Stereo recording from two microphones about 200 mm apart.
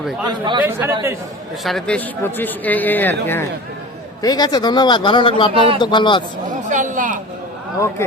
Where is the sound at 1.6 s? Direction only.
5° left (ahead or behind).